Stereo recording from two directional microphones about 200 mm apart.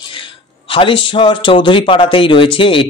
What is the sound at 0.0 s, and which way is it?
Speech, 25° left (ahead or behind).